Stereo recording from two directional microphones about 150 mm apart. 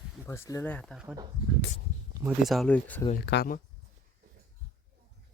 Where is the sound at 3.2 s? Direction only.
80° left.